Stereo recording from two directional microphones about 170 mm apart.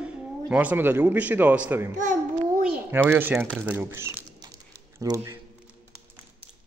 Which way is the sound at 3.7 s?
15° right (ahead or behind).